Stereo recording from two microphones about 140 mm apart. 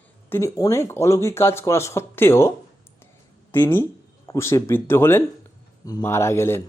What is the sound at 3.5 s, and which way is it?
Speech, 15° left (ahead or behind).